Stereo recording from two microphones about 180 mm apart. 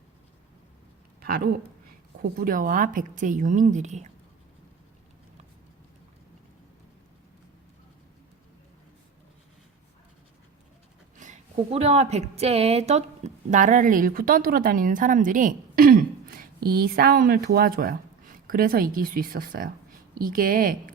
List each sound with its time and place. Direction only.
2.3 s speech: 50° right (ahead or behind)
11.2 s a woman's voice: 40° right (ahead or behind)